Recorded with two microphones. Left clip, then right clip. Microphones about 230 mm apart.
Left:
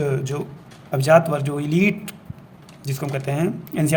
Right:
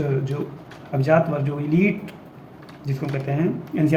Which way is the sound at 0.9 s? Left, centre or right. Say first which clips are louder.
Left 4 dB; left.